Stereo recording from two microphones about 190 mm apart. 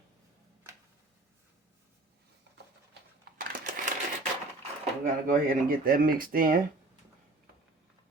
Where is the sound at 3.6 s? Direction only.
45° right (ahead or behind).